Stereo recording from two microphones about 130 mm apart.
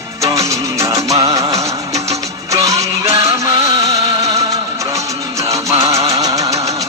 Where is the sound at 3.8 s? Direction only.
25° right (ahead or behind).